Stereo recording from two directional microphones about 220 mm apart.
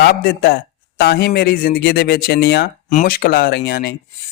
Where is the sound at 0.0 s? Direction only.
45° left (ahead or behind).